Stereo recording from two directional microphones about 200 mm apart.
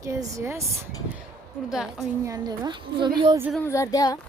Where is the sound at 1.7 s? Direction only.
Centre (ahead or behind).